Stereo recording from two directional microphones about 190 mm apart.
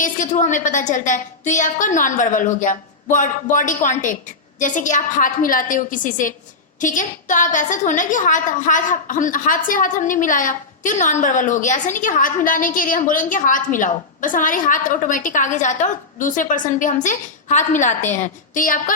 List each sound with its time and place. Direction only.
0.0 s a woman's voice: 40° left (ahead or behind)